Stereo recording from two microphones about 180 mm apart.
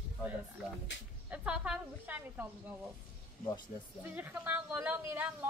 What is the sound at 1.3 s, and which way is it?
A woman's voice, 5° right (ahead or behind).